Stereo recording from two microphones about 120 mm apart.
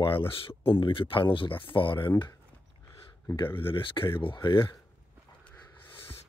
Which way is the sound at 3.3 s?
45° left (ahead or behind).